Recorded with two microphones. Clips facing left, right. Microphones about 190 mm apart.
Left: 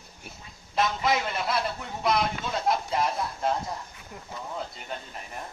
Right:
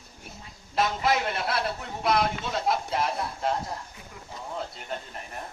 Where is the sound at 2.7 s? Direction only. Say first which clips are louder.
Left 1 dB; centre (ahead or behind).